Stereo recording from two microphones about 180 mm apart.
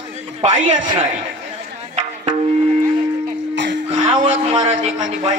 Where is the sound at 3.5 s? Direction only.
85° right.